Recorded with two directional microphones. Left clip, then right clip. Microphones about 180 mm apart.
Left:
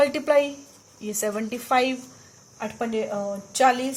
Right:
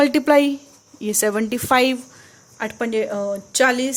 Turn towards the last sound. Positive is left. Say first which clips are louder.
# right 2 dB
turn(degrees=-50)  # may be behind; listen again after turning